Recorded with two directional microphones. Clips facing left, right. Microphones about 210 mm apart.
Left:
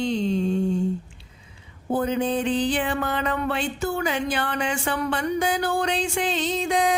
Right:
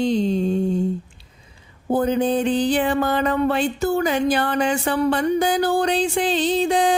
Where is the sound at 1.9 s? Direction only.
40° right (ahead or behind).